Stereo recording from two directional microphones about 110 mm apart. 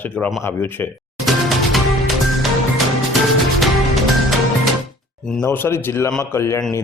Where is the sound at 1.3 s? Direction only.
Centre (ahead or behind).